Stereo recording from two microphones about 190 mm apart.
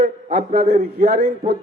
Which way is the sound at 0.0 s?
50° right (ahead or behind).